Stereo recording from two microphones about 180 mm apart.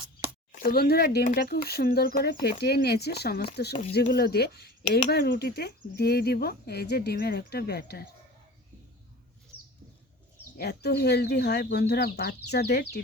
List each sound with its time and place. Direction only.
0.5 s speech: 55° left (ahead or behind)
10.6 s speech: 65° left (ahead or behind)